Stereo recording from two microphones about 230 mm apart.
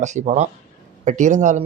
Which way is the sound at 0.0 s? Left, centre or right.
Right.